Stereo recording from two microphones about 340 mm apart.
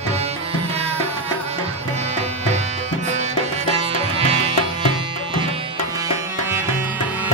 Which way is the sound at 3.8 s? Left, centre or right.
Centre.